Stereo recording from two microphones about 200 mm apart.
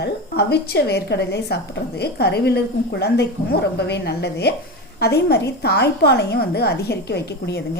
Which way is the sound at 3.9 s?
55° left (ahead or behind).